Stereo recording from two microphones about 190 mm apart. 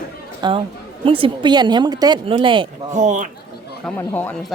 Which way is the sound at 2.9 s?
40° right (ahead or behind).